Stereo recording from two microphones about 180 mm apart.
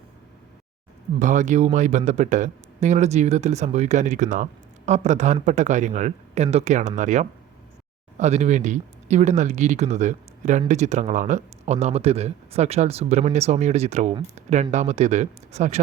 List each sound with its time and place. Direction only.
1.2 s speech: 45° right (ahead or behind)